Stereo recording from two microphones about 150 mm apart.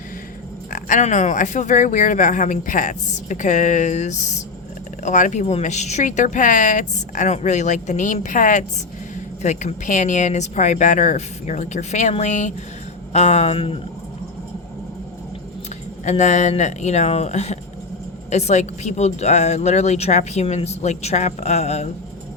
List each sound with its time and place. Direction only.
0.7 s speech: 60° left (ahead or behind); by 13.7 s 40° left (ahead or behind)
16.0 s speech: 50° left (ahead or behind)